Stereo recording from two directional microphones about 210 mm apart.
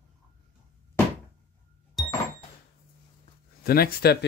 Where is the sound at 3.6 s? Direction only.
45° left (ahead or behind).